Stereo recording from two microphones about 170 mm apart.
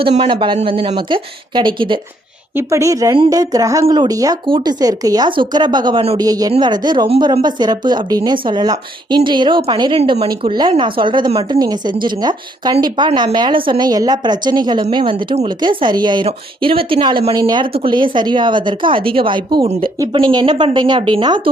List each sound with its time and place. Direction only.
0.2 s speech: 30° right (ahead or behind)
2.6 s speech: 15° right (ahead or behind)